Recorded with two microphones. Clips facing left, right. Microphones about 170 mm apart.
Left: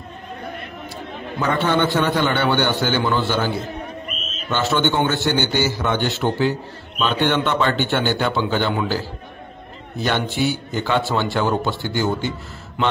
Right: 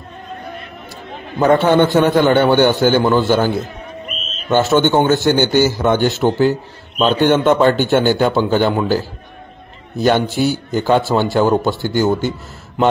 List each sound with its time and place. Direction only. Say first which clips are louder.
1.4 s a man's voice: right 8 dB; 50° right (ahead or behind)